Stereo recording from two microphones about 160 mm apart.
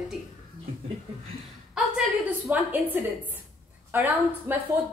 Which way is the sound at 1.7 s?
5° right (ahead or behind).